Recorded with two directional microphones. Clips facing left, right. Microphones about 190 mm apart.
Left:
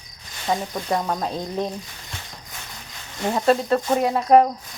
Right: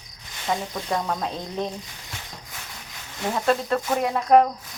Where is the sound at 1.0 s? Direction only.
5° left (ahead or behind).